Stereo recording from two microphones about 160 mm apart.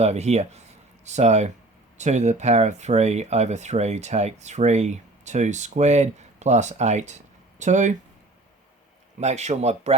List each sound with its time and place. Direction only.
0.0 s speech: 45° right (ahead or behind)
9.2 s speech: 45° right (ahead or behind)